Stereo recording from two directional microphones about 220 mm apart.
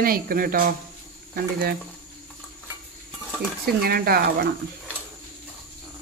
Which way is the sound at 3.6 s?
45° right (ahead or behind).